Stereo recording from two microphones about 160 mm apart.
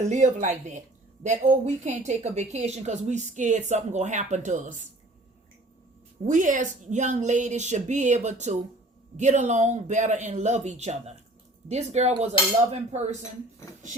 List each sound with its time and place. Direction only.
0.1 s a woman's voice: 50° right (ahead or behind)
6.2 s a woman's voice: 55° right (ahead or behind)